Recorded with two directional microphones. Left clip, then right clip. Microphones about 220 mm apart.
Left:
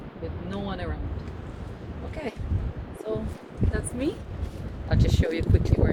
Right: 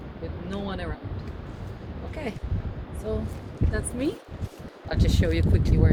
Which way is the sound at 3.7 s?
15° right (ahead or behind).